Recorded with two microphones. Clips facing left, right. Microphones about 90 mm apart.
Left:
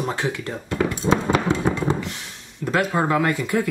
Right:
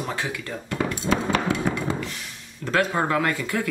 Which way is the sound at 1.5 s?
25° left (ahead or behind).